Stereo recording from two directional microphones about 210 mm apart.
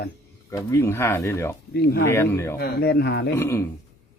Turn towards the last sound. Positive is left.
turn(degrees=10)  # may be behind; listen again after turning